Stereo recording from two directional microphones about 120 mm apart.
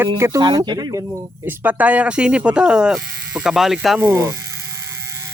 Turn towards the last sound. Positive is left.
turn(degrees=-20)  # may be behind; listen again after turning